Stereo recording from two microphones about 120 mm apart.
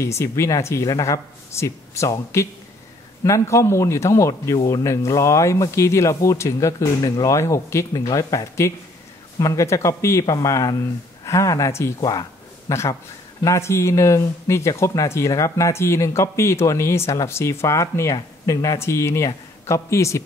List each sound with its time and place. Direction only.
0.0 s speech: 25° left (ahead or behind)